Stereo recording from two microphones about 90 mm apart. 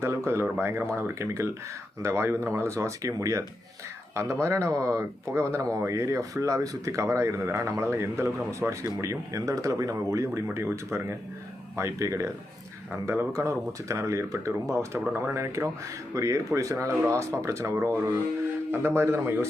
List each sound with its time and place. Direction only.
0.0 s a man's voice: 30° right (ahead or behind)